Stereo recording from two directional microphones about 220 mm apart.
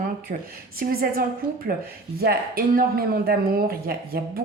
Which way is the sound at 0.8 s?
45° right (ahead or behind).